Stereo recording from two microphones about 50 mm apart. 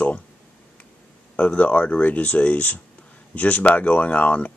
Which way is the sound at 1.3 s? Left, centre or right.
Left.